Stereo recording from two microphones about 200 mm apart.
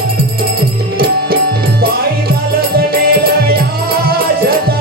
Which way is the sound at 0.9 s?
50° right (ahead or behind).